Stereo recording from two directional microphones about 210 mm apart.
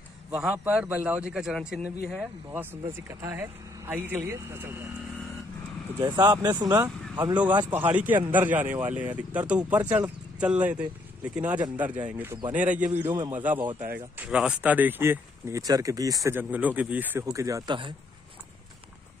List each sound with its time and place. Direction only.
0.3 s a man's voice: 5° right (ahead or behind)
5.9 s speech: 20° right (ahead or behind)
7.7 s speech: 10° right (ahead or behind)
13.0 s speech: 20° right (ahead or behind)
13.3 s speech: 10° right (ahead or behind)